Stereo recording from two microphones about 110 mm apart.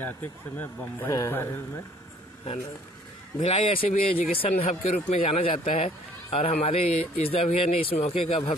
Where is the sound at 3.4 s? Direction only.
70° left (ahead or behind).